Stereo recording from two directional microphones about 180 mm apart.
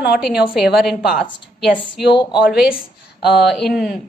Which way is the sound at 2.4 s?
5° right (ahead or behind).